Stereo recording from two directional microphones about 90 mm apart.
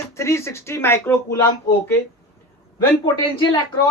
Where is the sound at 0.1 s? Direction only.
30° left (ahead or behind).